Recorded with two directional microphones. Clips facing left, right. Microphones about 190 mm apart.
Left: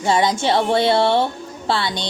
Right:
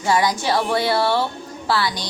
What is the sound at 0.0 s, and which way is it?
A woman's voice, 25° left (ahead or behind).